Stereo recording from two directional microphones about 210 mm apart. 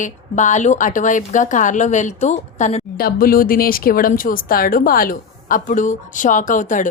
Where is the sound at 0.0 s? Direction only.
35° left (ahead or behind).